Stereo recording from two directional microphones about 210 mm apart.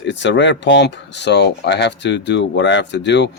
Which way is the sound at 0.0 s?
60° left (ahead or behind).